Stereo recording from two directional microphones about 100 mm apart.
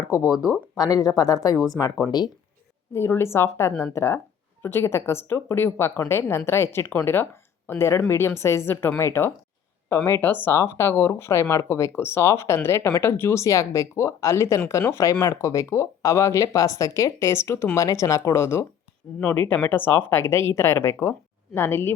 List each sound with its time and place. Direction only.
0.1 s speech: 40° left (ahead or behind)
2.9 s speech: 25° left (ahead or behind)